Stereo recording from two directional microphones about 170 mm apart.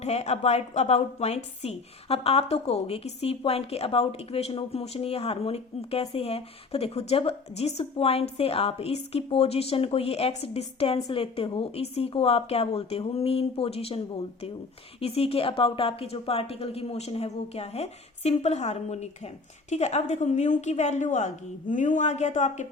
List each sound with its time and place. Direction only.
0.0 s a woman's voice: 40° left (ahead or behind)
15.0 s a woman's voice: 35° left (ahead or behind)